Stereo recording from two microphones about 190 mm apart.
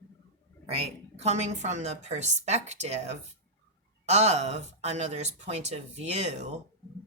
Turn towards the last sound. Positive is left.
turn(degrees=-35)  # may be behind; listen again after turning